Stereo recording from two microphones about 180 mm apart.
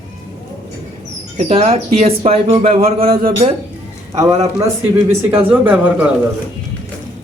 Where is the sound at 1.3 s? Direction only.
35° right (ahead or behind).